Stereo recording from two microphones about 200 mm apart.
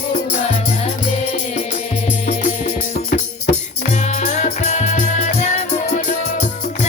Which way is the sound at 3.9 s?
35° left (ahead or behind).